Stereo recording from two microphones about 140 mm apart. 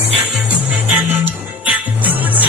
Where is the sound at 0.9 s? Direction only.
15° right (ahead or behind).